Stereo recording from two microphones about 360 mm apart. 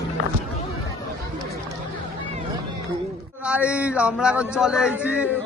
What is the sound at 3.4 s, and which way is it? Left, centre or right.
A man's voice, centre.